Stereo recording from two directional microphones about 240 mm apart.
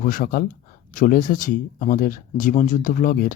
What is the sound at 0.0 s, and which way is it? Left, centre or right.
Speech, left.